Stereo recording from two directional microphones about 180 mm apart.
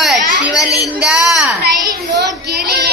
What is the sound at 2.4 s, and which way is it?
Speech, 60° right (ahead or behind).